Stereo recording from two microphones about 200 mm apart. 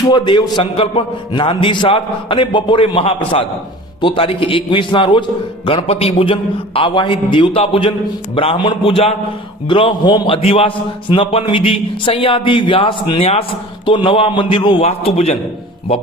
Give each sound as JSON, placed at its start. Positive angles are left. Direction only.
{"t": 0.1, "sound": "a man's voice", "side_deg": 20}